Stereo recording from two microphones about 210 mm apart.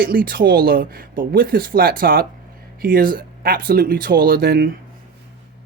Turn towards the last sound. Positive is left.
turn(degrees=-45)  # may be behind; listen again after turning